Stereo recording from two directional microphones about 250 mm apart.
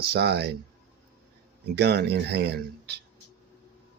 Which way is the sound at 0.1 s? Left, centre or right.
Right.